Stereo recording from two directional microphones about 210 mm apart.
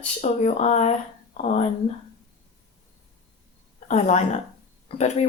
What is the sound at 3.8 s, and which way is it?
Speech, 35° left (ahead or behind).